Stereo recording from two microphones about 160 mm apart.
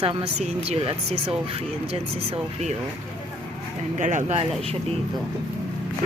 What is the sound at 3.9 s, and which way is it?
Speech, 50° right (ahead or behind).